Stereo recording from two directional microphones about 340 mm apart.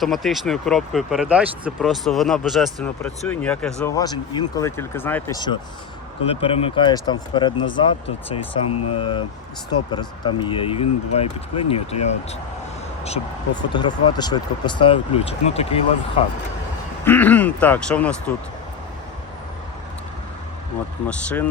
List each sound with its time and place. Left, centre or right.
0.0 s speech: centre
8.7 s speech: left
9.0 s speech: centre
13.7 s speech: centre
17.0 s speech: centre
21.1 s speech: centre